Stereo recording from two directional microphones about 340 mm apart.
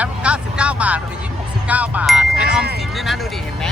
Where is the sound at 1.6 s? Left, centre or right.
Centre.